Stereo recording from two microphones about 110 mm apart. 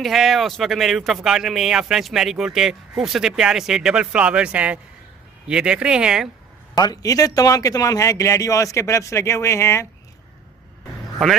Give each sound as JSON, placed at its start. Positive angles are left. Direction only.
{"t": 0.0, "sound": "speech", "side_deg": 0}
{"t": 6.7, "sound": "a man's voice", "side_deg": 35}